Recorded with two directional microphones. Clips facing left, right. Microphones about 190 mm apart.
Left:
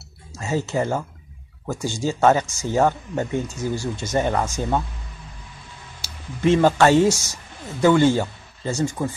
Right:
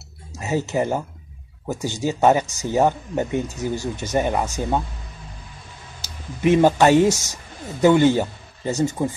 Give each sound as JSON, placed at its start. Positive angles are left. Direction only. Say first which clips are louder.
{"t": 0.4, "sound": "speech", "louder": "right 1 dB", "side_deg": -20}
{"t": 6.4, "sound": "speech", "louder": "right 1 dB", "side_deg": -15}